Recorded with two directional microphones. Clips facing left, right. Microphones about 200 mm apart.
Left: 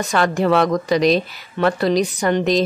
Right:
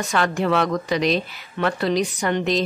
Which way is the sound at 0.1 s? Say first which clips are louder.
Left 4 dB; 40° left (ahead or behind).